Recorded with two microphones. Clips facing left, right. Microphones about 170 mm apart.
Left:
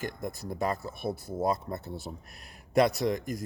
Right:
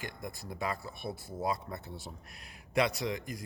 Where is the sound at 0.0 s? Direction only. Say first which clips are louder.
Left 6 dB; 45° left (ahead or behind).